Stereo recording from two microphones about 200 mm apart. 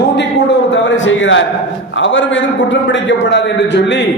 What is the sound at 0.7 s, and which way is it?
A man's voice, 70° left (ahead or behind).